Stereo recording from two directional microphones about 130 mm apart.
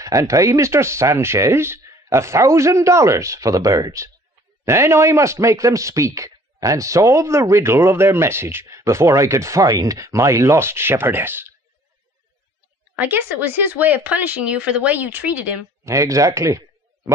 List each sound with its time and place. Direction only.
0.0 s a man's voice: 25° right (ahead or behind)
12.9 s speech: 15° right (ahead or behind)
15.8 s a man's voice: 25° right (ahead or behind)